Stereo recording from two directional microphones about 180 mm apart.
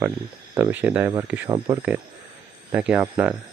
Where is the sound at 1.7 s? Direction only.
10° right (ahead or behind).